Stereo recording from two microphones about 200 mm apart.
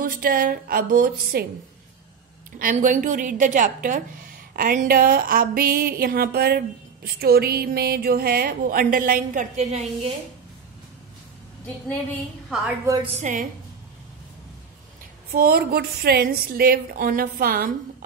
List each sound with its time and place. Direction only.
0.0 s a woman's voice: 45° right (ahead or behind)
2.6 s a woman's voice: 40° right (ahead or behind)
12.8 s a woman's voice: 20° right (ahead or behind)
13.1 s a woman's voice: 40° right (ahead or behind)
15.3 s a woman's voice: 50° right (ahead or behind)